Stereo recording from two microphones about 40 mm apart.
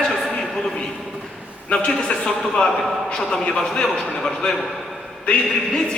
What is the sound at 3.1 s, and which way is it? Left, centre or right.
Speech, centre.